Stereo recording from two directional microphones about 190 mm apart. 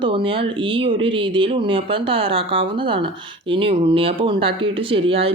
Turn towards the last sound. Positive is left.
turn(degrees=-30)  # may be behind; listen again after turning